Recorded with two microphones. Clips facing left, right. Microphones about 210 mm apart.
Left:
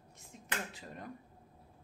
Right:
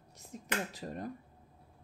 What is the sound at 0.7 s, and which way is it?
Speech, 40° right (ahead or behind).